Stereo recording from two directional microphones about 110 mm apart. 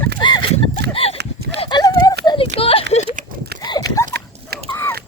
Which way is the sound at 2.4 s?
55° left (ahead or behind).